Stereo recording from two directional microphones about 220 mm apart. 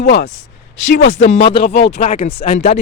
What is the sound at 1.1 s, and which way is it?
Speech, 30° left (ahead or behind).